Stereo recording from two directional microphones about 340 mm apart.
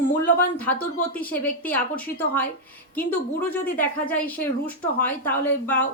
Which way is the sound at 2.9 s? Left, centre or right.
Centre.